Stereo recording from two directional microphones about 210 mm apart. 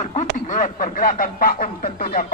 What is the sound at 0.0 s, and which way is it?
A man's voice, 35° left (ahead or behind).